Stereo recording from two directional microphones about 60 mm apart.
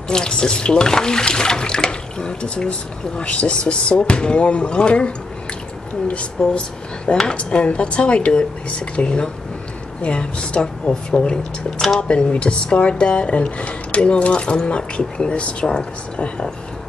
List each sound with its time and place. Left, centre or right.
0.1 s speech: centre
6.4 s speech: centre